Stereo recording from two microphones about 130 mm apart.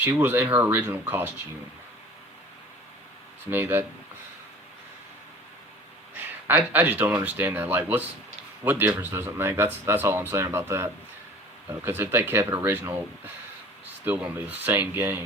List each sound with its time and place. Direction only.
0.0 s speech: 15° right (ahead or behind)
3.5 s speech: 15° right (ahead or behind)
6.5 s speech: 15° right (ahead or behind)